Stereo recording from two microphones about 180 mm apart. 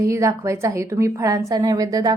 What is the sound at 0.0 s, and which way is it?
A woman's voice, 15° right (ahead or behind).